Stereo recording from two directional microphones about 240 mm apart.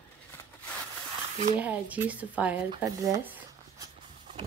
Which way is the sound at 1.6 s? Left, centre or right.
Centre.